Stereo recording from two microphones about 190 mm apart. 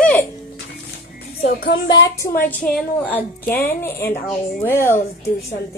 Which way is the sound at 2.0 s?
15° left (ahead or behind).